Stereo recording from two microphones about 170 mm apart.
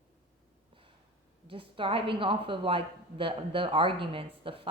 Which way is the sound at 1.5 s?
30° right (ahead or behind).